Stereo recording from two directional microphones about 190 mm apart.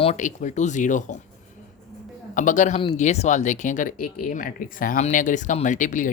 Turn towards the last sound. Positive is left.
turn(degrees=40)  # may be behind; listen again after turning